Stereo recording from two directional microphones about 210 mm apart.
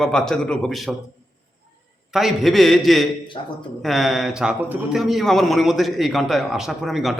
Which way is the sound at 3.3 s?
25° left (ahead or behind).